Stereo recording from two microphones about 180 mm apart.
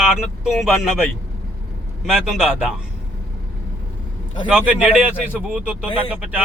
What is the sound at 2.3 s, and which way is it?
Speech, 5° right (ahead or behind).